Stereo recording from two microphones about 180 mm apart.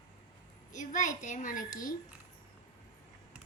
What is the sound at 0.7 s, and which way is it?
Speech, 45° left (ahead or behind).